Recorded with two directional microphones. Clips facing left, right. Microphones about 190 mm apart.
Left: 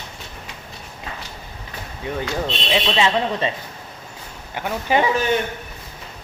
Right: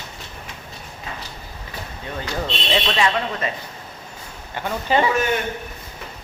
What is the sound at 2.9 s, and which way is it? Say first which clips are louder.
Speech: left 2 dB; 25° left (ahead or behind).